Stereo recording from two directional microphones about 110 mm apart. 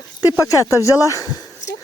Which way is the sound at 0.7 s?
30° left (ahead or behind).